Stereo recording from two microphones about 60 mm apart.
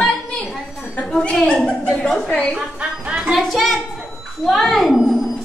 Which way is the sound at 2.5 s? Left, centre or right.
Centre.